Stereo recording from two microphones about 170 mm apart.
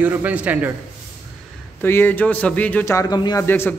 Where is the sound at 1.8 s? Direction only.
10° left (ahead or behind).